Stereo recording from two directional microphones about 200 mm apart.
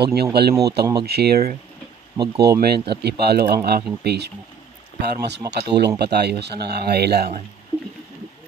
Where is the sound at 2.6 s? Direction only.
55° right (ahead or behind).